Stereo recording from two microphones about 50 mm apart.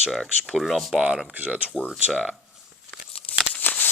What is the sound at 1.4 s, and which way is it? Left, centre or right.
Speech, right.